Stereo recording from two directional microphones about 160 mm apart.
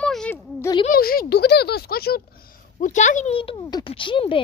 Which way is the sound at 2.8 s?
50° left (ahead or behind).